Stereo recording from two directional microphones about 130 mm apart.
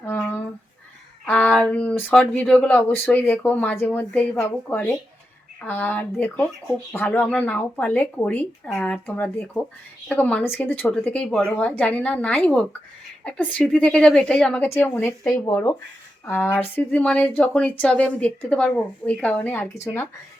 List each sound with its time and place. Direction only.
0.0 s a sound: 20° left (ahead or behind)
2.2 s speech: 10° left (ahead or behind)
14.7 s a woman's voice: 20° left (ahead or behind)